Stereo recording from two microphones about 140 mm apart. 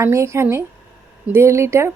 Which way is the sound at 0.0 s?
20° right (ahead or behind).